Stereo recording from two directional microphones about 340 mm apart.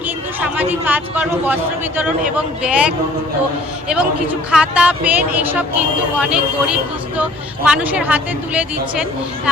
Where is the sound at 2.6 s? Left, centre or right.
Centre.